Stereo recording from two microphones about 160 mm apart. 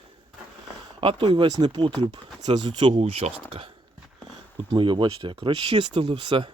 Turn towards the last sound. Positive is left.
turn(degrees=-30)  # may be behind; listen again after turning